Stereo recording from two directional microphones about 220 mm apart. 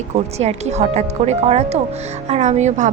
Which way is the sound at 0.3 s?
30° right (ahead or behind).